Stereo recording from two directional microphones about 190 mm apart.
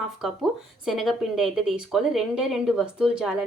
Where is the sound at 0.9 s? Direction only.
Centre (ahead or behind).